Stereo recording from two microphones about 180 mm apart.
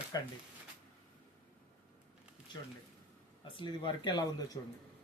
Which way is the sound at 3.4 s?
25° left (ahead or behind).